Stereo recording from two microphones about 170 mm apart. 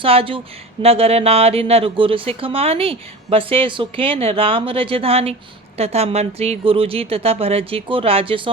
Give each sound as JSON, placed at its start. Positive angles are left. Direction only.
{"t": 0.0, "sound": "speech", "side_deg": -35}